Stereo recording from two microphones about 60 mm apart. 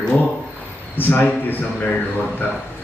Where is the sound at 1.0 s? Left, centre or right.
Left.